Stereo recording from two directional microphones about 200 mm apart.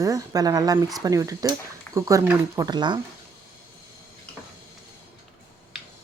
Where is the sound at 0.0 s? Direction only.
15° right (ahead or behind).